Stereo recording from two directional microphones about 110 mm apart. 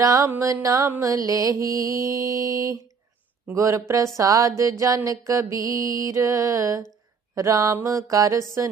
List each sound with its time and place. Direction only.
0.0 s music: 30° right (ahead or behind)